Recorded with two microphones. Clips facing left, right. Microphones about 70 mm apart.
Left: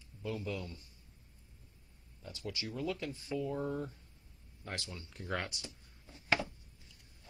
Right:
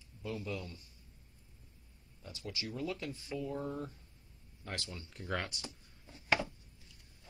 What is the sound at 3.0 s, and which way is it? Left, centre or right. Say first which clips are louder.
Speech: left 2 dB; left.